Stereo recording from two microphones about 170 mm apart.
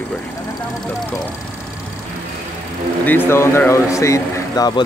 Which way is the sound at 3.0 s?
10° left (ahead or behind).